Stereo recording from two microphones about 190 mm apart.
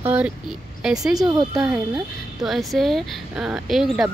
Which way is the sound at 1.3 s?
20° right (ahead or behind).